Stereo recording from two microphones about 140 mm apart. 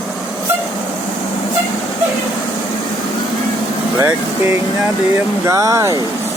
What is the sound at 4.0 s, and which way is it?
Speech, 20° right (ahead or behind).